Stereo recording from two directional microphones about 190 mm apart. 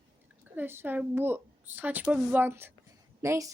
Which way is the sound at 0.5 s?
10° right (ahead or behind).